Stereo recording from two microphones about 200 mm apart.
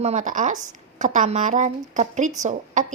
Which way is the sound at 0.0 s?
35° right (ahead or behind).